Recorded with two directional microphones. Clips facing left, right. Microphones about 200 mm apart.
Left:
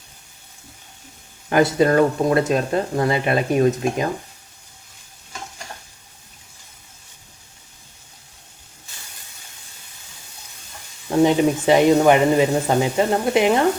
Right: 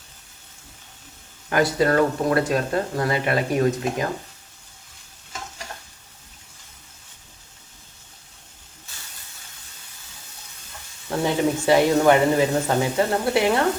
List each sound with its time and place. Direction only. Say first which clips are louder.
1.5 s speech: left 3 dB; 20° left (ahead or behind)
11.2 s speech: left 6 dB; 20° left (ahead or behind)